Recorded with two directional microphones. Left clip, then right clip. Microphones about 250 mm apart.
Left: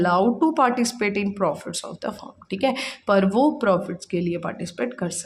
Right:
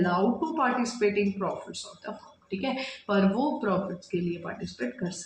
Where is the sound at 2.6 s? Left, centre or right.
Left.